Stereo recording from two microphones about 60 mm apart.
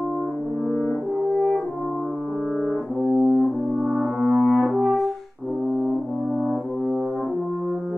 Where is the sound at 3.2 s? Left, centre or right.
Right.